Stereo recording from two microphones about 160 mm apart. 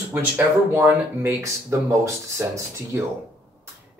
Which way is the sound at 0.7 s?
15° right (ahead or behind).